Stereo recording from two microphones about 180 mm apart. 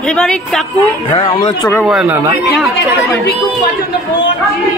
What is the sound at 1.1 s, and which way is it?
Speech, 20° left (ahead or behind).